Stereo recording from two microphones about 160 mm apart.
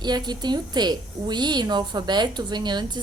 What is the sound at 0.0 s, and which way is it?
A woman's voice, 25° right (ahead or behind).